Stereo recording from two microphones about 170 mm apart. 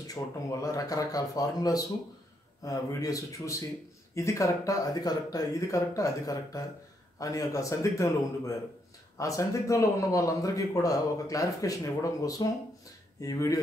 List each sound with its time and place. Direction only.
0.0 s a man's voice: 20° left (ahead or behind)